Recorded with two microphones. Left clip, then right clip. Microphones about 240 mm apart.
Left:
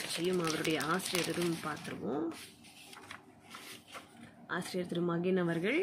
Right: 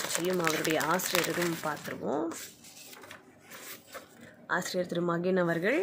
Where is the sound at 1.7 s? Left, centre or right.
Centre.